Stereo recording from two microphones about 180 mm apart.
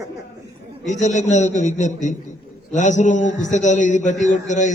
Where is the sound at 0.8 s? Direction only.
40° left (ahead or behind).